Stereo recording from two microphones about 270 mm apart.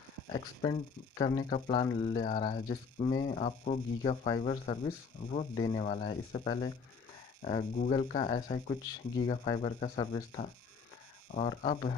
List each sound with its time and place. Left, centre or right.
0.3 s speech: centre